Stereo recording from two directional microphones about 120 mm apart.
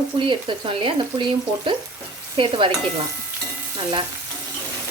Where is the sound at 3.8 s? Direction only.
45° right (ahead or behind).